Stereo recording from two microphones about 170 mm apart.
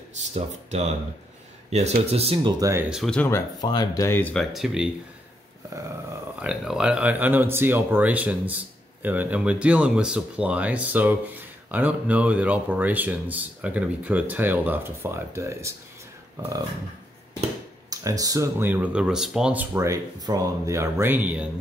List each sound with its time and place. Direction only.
0.3 s speech: 40° right (ahead or behind)
2.7 s speech: 10° right (ahead or behind)
3.0 s speech: 5° left (ahead or behind)
3.6 s speech: 25° left (ahead or behind); by 4.8 s centre (ahead or behind)
6.4 s speech: 5° right (ahead or behind)
17.8 s speech: 20° right (ahead or behind)